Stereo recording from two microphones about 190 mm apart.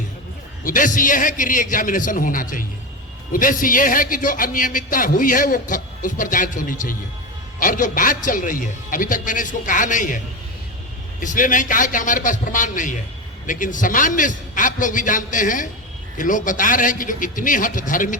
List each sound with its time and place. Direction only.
0.6 s a man's voice: 45° left (ahead or behind)
11.2 s a man's voice: 45° left (ahead or behind)